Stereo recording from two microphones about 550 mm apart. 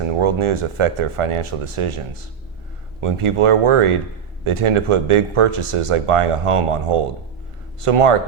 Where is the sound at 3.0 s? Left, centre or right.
Right.